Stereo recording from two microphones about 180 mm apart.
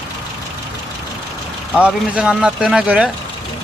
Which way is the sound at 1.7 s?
5° right (ahead or behind).